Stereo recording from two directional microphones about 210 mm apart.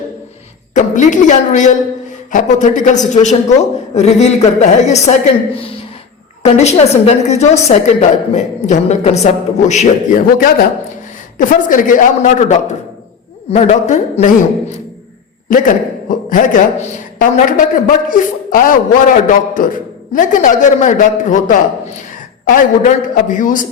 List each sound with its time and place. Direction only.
0.7 s a man's voice: 35° left (ahead or behind)
6.4 s a man's voice: 30° left (ahead or behind)